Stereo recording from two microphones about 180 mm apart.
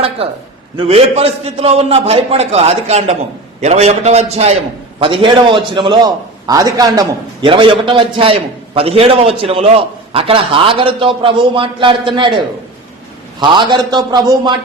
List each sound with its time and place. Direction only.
0.8 s a man's voice: 35° right (ahead or behind)
13.6 s a man's voice: 25° right (ahead or behind)